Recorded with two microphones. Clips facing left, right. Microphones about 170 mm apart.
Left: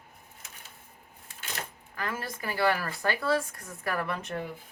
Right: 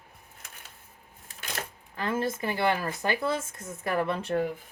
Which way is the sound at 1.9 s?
25° right (ahead or behind).